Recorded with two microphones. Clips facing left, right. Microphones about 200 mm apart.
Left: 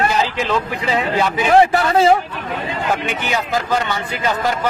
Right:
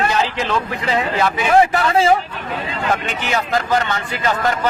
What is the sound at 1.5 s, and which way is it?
Speech, 35° left (ahead or behind).